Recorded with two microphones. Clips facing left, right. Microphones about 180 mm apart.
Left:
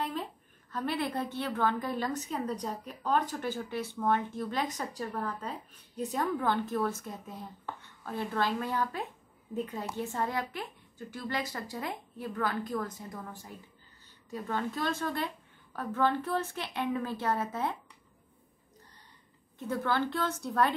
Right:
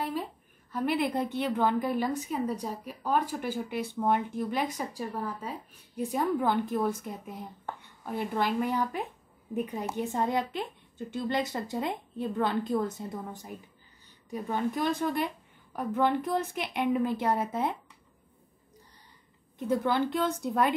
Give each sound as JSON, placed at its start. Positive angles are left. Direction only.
{"t": 0.0, "sound": "a woman's voice", "side_deg": -10}
{"t": 19.7, "sound": "a woman's voice", "side_deg": -15}